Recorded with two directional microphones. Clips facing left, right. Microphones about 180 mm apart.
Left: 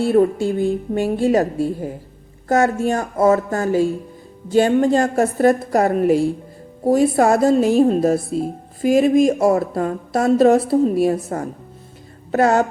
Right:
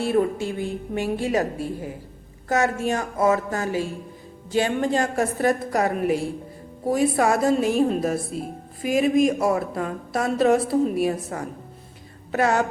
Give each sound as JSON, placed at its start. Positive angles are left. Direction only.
{"t": 0.1, "sound": "a woman's voice", "side_deg": 40}
{"t": 1.0, "sound": "a woman's voice", "side_deg": 30}
{"t": 6.8, "sound": "music", "side_deg": 30}
{"t": 8.3, "sound": "a woman's voice", "side_deg": 35}
{"t": 8.8, "sound": "music", "side_deg": 30}
{"t": 9.5, "sound": "a woman's voice", "side_deg": 35}
{"t": 10.3, "sound": "a woman's voice", "side_deg": 30}